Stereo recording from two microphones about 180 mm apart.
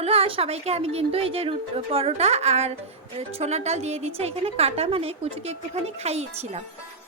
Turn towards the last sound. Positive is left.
turn(degrees=-40)  # may be behind; listen again after turning